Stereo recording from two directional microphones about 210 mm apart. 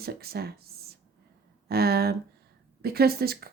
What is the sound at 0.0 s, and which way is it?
Speech, 50° right (ahead or behind).